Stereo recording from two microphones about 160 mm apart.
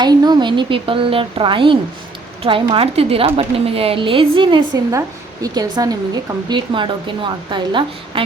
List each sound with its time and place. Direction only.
0.0 s a woman's voice: 25° right (ahead or behind)